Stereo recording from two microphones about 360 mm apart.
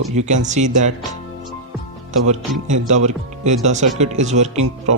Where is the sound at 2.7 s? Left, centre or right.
Centre.